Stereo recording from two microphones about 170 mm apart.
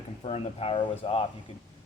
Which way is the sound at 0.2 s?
35° left (ahead or behind).